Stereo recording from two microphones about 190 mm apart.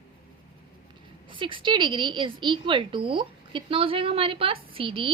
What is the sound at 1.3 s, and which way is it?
A woman's voice, 25° right (ahead or behind).